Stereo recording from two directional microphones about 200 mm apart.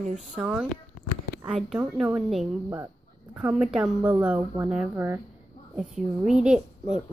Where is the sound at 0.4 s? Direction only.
5° right (ahead or behind).